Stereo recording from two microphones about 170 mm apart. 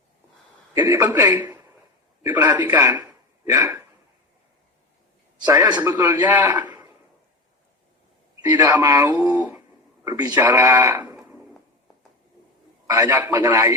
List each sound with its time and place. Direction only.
0.7 s a man's voice: 20° right (ahead or behind)
5.5 s a man's voice: 20° right (ahead or behind)
6.5 s a man's voice: 25° right (ahead or behind)
8.5 s a man's voice: 20° right (ahead or behind)
12.9 s a man's voice: 15° right (ahead or behind)